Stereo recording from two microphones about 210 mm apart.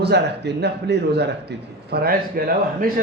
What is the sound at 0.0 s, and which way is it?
A man's voice, 50° right (ahead or behind).